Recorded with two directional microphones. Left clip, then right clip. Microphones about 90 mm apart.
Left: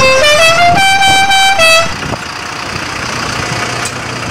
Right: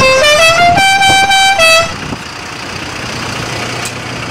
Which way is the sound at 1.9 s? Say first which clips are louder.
Left 3 dB; 45° left (ahead or behind).